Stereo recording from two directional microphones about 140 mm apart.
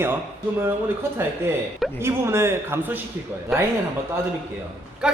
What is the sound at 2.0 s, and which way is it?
Speech, 20° right (ahead or behind).